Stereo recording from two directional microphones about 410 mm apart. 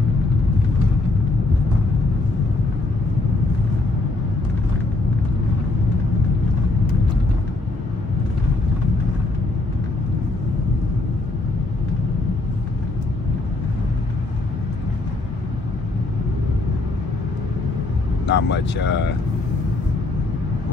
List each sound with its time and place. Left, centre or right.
18.2 s speech: left